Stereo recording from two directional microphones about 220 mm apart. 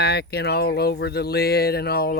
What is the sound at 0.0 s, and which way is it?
Speech, 45° left (ahead or behind).